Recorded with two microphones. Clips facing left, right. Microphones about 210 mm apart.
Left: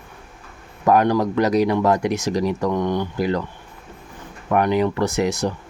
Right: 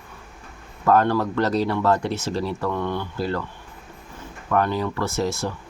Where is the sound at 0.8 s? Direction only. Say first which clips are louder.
Left 2 dB; 15° left (ahead or behind).